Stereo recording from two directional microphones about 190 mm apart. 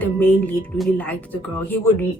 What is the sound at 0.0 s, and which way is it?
A woman's voice, 10° left (ahead or behind).